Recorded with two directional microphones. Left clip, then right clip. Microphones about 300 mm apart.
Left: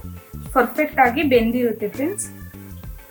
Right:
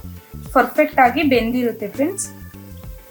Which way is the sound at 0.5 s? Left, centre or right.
Centre.